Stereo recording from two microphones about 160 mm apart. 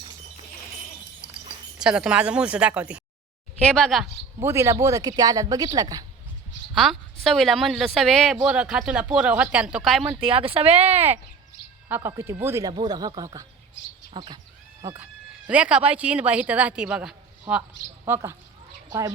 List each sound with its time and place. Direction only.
1.8 s speech: 5° right (ahead or behind)
3.6 s speech: 5° left (ahead or behind)
4.4 s speech: 15° right (ahead or behind)
6.7 s speech: centre (ahead or behind)
10.2 s speech: 35° right (ahead or behind)
11.9 s speech: 15° right (ahead or behind)
14.1 s speech: 35° right (ahead or behind)
14.8 s speech: 15° right (ahead or behind)
18.0 s speech: 15° right (ahead or behind)